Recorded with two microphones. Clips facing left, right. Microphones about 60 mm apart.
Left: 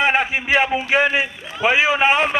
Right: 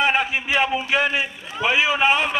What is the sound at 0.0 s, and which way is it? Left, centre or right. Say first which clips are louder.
A man's voice: left 2 dB; left.